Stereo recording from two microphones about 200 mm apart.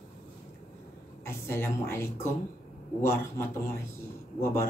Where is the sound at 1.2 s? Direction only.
10° left (ahead or behind).